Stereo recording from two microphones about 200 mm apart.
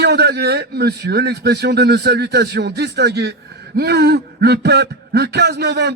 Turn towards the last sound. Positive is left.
turn(degrees=-55)  # may be behind; listen again after turning